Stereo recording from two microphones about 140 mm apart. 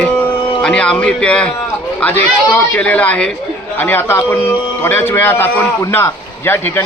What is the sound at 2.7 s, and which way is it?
A man's voice, 10° left (ahead or behind).